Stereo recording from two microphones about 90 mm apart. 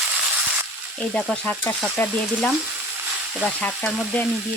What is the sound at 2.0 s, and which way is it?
Speech, 20° left (ahead or behind).